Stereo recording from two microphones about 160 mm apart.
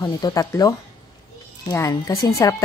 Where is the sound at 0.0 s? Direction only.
25° left (ahead or behind).